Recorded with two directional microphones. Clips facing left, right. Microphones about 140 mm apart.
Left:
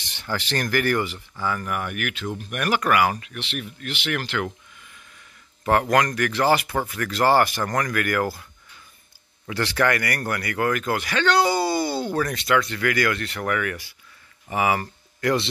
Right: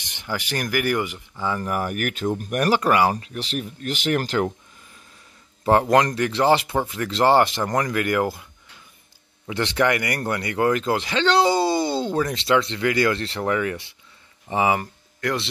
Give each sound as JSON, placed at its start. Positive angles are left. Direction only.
{"t": 0.0, "sound": "speech", "side_deg": -15}
{"t": 1.6, "sound": "speech", "side_deg": -35}
{"t": 5.7, "sound": "speech", "side_deg": -25}
{"t": 9.5, "sound": "speech", "side_deg": -20}
{"t": 15.1, "sound": "speech", "side_deg": 0}